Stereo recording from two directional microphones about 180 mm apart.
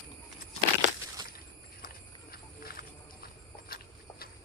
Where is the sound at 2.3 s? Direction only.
55° left (ahead or behind).